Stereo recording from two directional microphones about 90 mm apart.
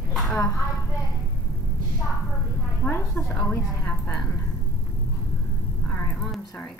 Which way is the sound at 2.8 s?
25° left (ahead or behind).